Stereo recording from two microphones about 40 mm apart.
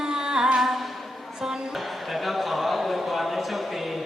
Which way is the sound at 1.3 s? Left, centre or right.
Centre.